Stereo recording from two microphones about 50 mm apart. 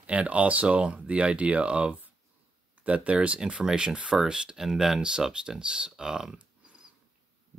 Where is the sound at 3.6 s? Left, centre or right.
Centre.